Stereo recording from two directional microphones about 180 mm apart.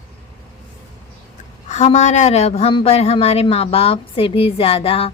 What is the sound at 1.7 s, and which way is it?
Speech, 40° left (ahead or behind).